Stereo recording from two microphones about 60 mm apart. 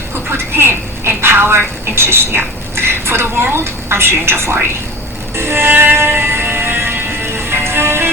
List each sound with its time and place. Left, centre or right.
0.3 s a woman's voice: right
5.4 s music: right